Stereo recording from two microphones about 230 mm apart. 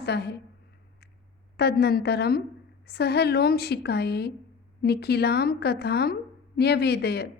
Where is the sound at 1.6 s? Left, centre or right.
Left.